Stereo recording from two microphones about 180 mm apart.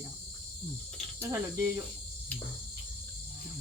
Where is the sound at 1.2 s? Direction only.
15° right (ahead or behind).